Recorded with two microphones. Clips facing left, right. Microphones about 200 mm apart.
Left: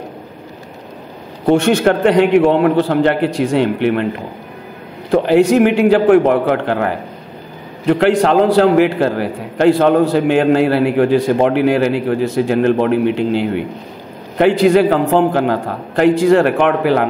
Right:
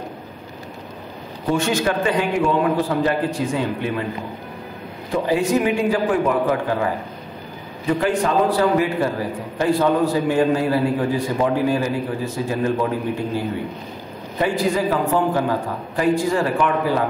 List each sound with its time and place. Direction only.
1.5 s a man's voice: 65° left (ahead or behind)
5.1 s a man's voice: 70° left (ahead or behind)